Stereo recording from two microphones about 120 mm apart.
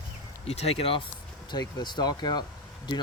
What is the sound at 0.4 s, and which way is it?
Speech, 60° left (ahead or behind).